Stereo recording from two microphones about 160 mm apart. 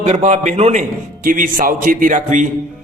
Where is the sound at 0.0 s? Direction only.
45° right (ahead or behind).